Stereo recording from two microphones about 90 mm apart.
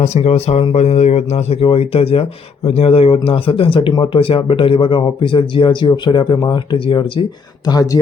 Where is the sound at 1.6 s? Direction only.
90° left; by 7.2 s 65° left (ahead or behind).